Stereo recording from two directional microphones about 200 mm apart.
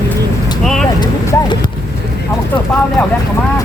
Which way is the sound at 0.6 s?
Centre (ahead or behind).